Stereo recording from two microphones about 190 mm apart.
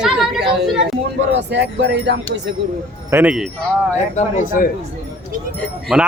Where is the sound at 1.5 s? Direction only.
65° right (ahead or behind).